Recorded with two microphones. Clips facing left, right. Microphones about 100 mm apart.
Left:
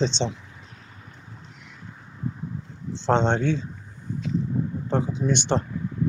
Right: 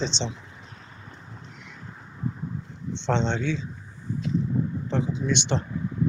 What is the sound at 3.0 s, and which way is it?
Speech, 45° left (ahead or behind).